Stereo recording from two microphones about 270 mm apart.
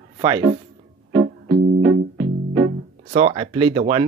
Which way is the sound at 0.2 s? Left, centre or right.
Centre.